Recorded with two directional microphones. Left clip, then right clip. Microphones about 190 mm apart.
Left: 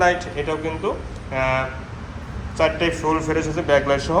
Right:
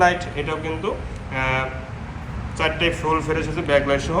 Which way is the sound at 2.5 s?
25° left (ahead or behind).